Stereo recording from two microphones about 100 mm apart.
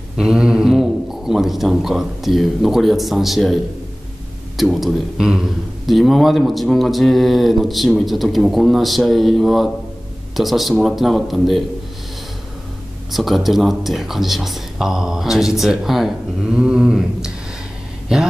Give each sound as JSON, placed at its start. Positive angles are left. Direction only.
{"t": 0.2, "sound": "a man's voice", "side_deg": -10}
{"t": 13.1, "sound": "speech", "side_deg": 0}